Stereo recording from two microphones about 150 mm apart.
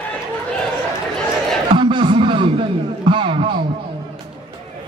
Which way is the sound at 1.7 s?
35° right (ahead or behind).